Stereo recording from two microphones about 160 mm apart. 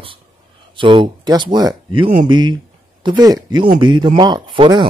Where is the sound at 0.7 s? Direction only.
35° right (ahead or behind).